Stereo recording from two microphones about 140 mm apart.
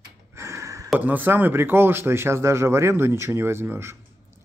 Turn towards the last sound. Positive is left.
turn(degrees=-15)  # may be behind; listen again after turning